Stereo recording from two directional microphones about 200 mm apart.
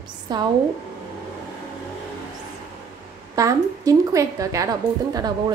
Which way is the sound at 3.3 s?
15° right (ahead or behind).